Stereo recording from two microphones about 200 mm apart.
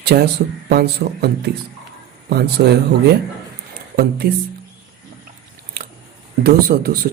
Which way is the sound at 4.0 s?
50° right (ahead or behind).